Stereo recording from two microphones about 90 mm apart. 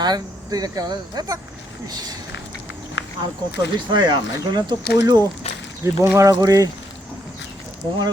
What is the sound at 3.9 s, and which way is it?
Speech, 55° right (ahead or behind).